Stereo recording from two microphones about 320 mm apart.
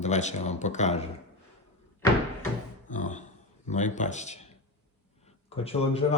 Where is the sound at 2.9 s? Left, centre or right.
Left.